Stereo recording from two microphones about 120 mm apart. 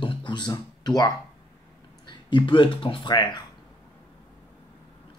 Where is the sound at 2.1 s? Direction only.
40° left (ahead or behind).